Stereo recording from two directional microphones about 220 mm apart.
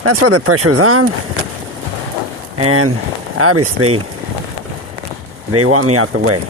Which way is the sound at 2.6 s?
90° right.